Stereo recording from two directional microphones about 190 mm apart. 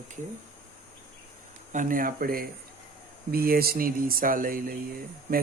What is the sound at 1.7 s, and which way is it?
Speech, 45° right (ahead or behind).